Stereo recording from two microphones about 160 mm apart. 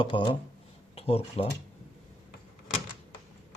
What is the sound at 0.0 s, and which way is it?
Speech, 30° left (ahead or behind).